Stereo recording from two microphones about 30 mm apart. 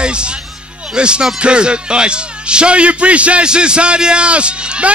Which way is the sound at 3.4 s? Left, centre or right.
Right.